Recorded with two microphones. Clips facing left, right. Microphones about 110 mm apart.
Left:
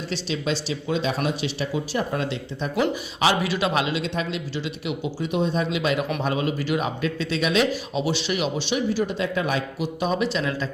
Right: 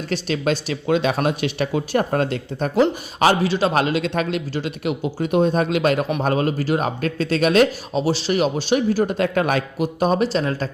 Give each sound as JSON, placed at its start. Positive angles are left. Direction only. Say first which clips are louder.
{"t": 0.1, "sound": "speech", "louder": "right 5 dB", "side_deg": -50}
{"t": 3.4, "sound": "speech", "louder": "right 5 dB", "side_deg": -35}